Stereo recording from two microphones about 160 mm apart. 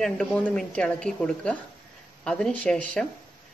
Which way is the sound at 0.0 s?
5° left (ahead or behind).